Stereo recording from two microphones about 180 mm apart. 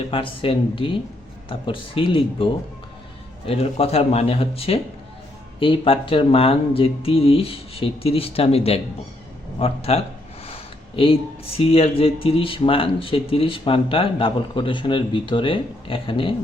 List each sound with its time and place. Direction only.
0.1 s speech: 30° left (ahead or behind)